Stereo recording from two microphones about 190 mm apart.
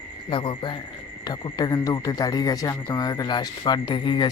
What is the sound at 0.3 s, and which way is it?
Speech, 25° left (ahead or behind).